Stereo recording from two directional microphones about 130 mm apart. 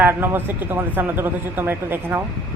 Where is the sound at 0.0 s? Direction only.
15° right (ahead or behind).